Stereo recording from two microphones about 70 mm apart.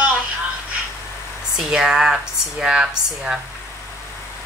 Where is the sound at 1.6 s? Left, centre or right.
Centre.